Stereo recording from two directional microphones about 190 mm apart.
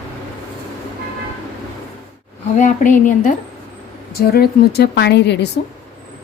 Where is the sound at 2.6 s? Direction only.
40° left (ahead or behind).